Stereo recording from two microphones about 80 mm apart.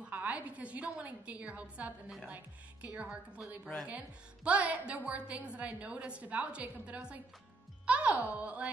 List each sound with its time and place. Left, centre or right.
0.0 s a woman's voice: centre